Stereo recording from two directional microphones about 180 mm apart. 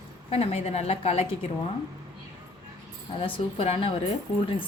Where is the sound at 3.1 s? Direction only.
30° left (ahead or behind).